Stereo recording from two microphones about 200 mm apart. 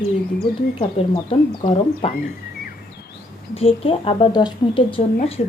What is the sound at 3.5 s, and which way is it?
Speech, 30° left (ahead or behind).